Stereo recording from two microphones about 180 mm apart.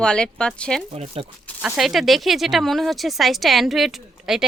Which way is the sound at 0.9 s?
35° right (ahead or behind).